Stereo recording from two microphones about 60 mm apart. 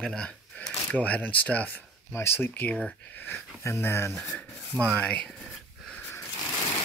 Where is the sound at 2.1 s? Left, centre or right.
Left.